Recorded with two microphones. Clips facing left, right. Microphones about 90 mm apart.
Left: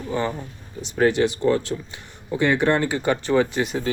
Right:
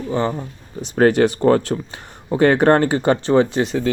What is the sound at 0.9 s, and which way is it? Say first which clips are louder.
Speech: right 5 dB; 50° right (ahead or behind).